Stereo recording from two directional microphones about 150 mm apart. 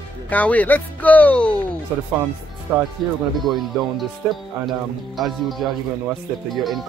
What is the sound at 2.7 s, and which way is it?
Speech, 15° right (ahead or behind).